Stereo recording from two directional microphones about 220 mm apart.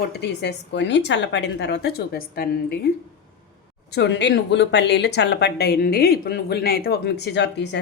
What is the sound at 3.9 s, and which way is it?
Speech, 50° left (ahead or behind).